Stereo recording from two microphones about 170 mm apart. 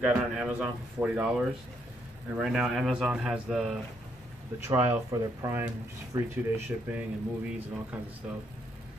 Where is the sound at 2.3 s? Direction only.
Centre (ahead or behind).